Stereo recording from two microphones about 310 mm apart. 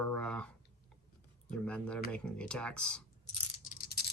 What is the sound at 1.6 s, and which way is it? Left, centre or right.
Speech, centre.